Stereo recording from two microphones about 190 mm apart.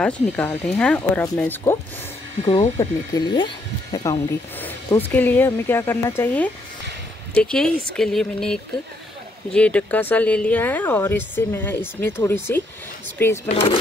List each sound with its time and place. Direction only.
0.0 s speech: 5° left (ahead or behind)
2.8 s speech: 20° left (ahead or behind)
13.5 s speech: 30° left (ahead or behind)